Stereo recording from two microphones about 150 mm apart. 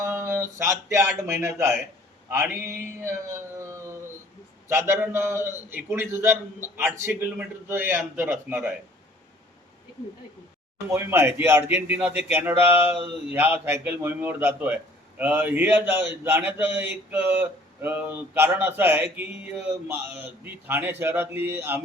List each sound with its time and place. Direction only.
0.0 s speech: 20° right (ahead or behind)
2.3 s a sound: 15° right (ahead or behind)
4.7 s a man's voice: 15° right (ahead or behind)
10.8 s a man's voice: 15° right (ahead or behind)